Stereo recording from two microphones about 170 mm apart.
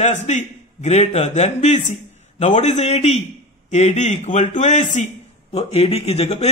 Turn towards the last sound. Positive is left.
turn(degrees=40)  # may be behind; listen again after turning